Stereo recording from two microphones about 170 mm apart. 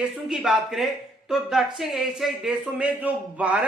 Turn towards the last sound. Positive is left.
turn(degrees=-10)  # may be behind; listen again after turning